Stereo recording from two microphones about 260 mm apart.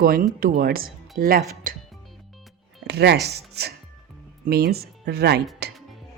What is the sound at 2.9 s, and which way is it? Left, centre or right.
Speech, right.